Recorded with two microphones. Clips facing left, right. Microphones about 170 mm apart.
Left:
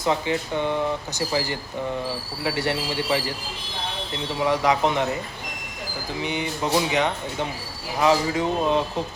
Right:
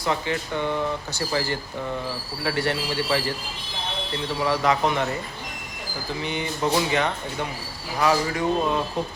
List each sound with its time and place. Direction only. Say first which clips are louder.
0.0 s speech: left 2 dB; 15° left (ahead or behind)
4.4 s speech: left 2 dB; 15° left (ahead or behind)
6.2 s speech: right 1 dB; 15° left (ahead or behind)